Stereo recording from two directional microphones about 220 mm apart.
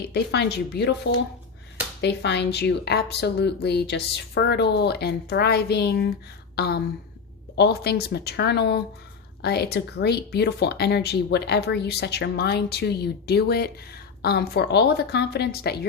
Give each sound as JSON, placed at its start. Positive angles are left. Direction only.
{"t": 0.0, "sound": "speech", "side_deg": 50}